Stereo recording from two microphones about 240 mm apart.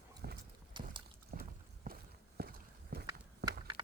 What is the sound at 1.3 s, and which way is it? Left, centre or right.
Boat, right.